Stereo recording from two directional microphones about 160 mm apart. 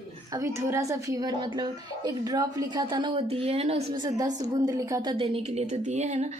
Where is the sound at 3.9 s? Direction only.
25° right (ahead or behind).